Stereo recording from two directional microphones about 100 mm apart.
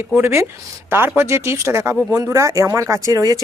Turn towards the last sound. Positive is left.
turn(degrees=-35)  # may be behind; listen again after turning